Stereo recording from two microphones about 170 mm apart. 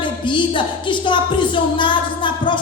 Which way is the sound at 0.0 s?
30° left (ahead or behind).